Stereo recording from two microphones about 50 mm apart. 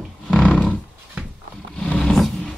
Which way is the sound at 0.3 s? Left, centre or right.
Left.